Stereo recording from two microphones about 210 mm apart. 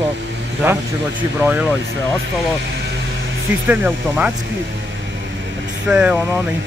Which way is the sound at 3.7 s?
5° right (ahead or behind).